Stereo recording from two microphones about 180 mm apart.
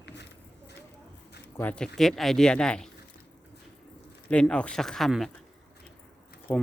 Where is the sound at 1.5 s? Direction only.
10° left (ahead or behind).